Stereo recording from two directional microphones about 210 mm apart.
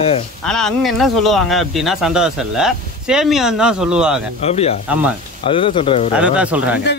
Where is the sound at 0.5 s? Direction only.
Centre (ahead or behind).